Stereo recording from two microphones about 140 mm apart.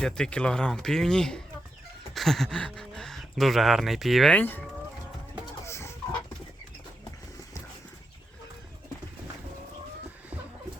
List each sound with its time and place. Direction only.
0.0 s speech: 5° left (ahead or behind)
4.4 s speech: 15° left (ahead or behind)
5.6 s chicken: 20° left (ahead or behind)